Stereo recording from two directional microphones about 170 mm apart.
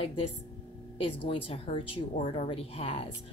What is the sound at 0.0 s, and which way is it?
Speech, 35° left (ahead or behind).